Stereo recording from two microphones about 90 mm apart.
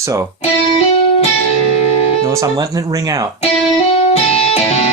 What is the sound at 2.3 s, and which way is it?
Speech, 35° right (ahead or behind).